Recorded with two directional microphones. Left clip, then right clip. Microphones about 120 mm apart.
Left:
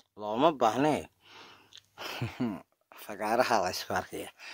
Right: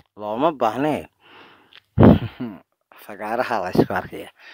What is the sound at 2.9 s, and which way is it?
Speech, 30° right (ahead or behind).